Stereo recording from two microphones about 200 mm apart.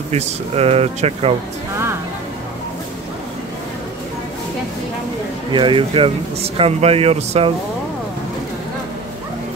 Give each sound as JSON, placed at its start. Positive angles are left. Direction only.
{"t": 0.1, "sound": "speech", "side_deg": -30}
{"t": 5.5, "sound": "speech", "side_deg": -25}